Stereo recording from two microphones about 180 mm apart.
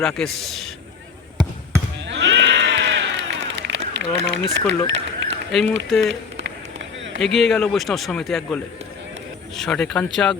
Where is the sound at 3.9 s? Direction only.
70° right (ahead or behind).